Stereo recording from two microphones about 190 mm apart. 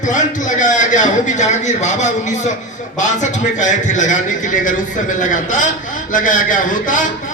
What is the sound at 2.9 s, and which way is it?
A man's voice, 40° left (ahead or behind).